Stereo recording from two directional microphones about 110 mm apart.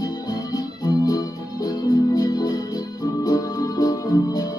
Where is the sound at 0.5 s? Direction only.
35° left (ahead or behind).